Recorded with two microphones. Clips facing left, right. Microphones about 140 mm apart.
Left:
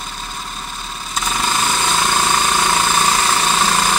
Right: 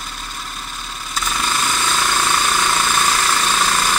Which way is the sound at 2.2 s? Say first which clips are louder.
Left 2 dB; 20° left (ahead or behind).